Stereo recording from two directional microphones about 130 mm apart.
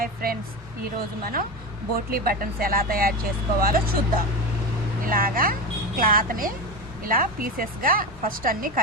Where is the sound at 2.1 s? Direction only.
90° right.